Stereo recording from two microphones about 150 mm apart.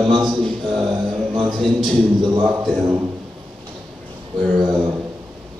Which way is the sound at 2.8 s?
20° right (ahead or behind).